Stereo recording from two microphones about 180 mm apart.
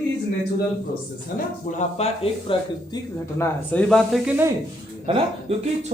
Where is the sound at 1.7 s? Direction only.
45° left (ahead or behind).